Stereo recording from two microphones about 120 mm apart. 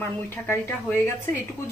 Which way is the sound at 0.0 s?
20° left (ahead or behind).